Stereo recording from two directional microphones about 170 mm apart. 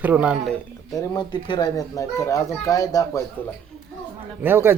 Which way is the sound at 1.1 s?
25° left (ahead or behind).